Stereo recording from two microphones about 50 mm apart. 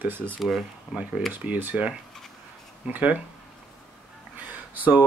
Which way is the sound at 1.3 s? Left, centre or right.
Right.